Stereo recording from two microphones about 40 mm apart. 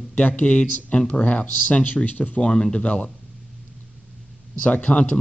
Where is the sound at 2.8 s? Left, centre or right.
Left.